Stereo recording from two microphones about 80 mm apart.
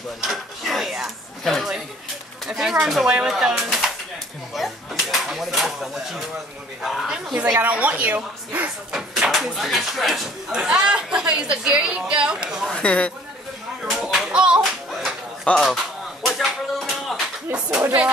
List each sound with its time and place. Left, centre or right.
0.2 s speech: centre
7.6 s a woman's voice: centre
8.9 s speech: centre
12.7 s speech: centre
13.8 s a sound: centre
14.6 s music: centre
15.4 s a sound: centre